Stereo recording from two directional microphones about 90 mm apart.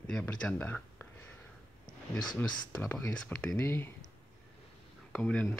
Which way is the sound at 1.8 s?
50° left (ahead or behind).